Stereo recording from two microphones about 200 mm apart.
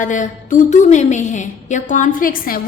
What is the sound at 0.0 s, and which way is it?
A woman's voice, 40° left (ahead or behind).